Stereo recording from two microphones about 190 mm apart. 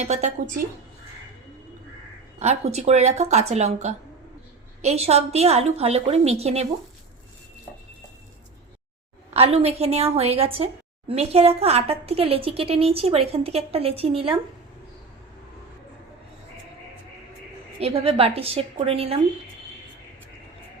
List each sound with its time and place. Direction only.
0.0 s speech: 35° right (ahead or behind)
2.4 s speech: 35° right (ahead or behind)
9.3 s speech: 30° right (ahead or behind)
17.7 s speech: 30° right (ahead or behind)